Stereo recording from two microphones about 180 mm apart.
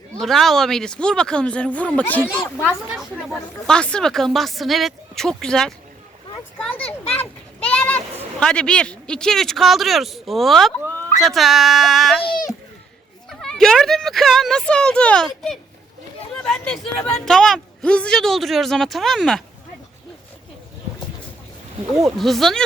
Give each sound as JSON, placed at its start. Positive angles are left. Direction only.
{"t": 0.2, "sound": "speech", "side_deg": 0}
{"t": 2.6, "sound": "speech", "side_deg": -5}
{"t": 6.7, "sound": "a sound", "side_deg": 35}
{"t": 7.6, "sound": "a child's voice", "side_deg": 5}
{"t": 12.2, "sound": "a child's voice", "side_deg": 55}
{"t": 13.4, "sound": "speech", "side_deg": 5}
{"t": 22.0, "sound": "speech", "side_deg": 0}